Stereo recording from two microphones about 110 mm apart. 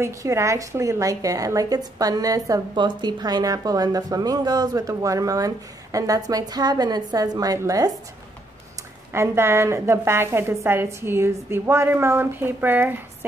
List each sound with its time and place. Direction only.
0.0 s speech: 25° right (ahead or behind)
2.7 s speech: 45° right (ahead or behind)
9.1 s a woman's voice: 25° right (ahead or behind)